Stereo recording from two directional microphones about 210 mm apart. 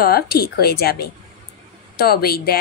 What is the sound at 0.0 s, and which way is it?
Speech, 45° left (ahead or behind).